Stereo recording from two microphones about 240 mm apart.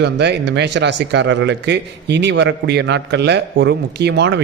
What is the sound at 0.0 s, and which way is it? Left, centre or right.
Speech, right.